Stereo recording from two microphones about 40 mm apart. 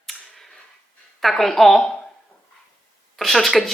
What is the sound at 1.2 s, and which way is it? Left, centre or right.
Speech, centre.